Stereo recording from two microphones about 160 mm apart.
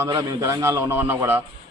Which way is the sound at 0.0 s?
20° right (ahead or behind).